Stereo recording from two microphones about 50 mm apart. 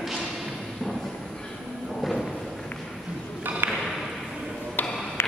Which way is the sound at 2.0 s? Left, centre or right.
Centre.